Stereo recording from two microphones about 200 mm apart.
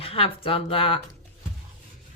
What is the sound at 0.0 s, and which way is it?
Speech, 30° left (ahead or behind).